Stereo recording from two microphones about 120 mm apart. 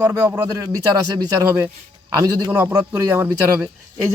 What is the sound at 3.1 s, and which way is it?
Speech, 30° right (ahead or behind).